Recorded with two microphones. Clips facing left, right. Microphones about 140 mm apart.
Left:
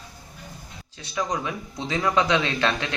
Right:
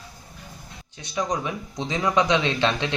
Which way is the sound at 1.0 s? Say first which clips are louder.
Right 1 dB; 20° right (ahead or behind).